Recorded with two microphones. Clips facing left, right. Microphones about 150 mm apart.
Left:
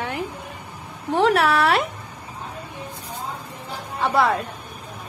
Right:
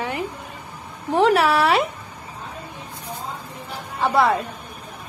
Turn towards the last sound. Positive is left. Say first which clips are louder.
# right 1 dB
turn(degrees=0)  # may be behind; listen again after turning